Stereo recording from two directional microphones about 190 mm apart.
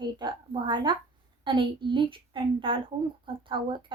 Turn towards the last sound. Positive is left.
turn(degrees=-25)  # may be behind; listen again after turning